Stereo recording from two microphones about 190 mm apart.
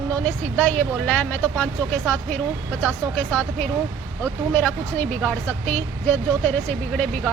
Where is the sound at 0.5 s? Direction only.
5° left (ahead or behind).